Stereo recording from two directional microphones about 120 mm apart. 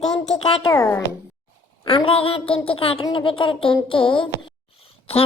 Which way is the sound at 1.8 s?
50° left (ahead or behind).